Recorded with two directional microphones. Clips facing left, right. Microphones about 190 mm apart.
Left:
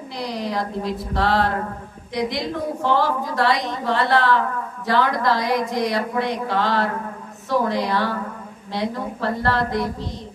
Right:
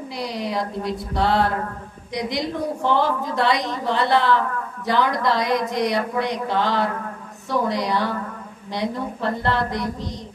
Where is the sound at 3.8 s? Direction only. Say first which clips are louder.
Even; 20° right (ahead or behind).